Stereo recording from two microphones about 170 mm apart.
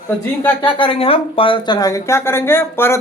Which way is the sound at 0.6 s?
30° left (ahead or behind).